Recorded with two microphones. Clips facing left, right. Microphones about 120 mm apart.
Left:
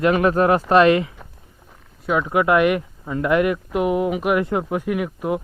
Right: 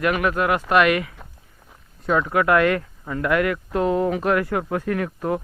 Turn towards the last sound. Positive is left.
turn(degrees=10)  # may be behind; listen again after turning